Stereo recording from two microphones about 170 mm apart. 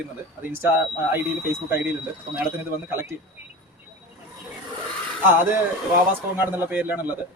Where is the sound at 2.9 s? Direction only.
15° right (ahead or behind).